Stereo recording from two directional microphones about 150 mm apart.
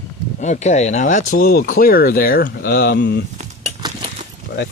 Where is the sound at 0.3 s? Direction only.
55° left (ahead or behind); by 3.2 s 90° left.